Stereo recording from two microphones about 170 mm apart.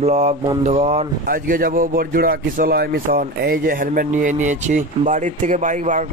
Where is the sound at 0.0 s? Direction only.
40° right (ahead or behind).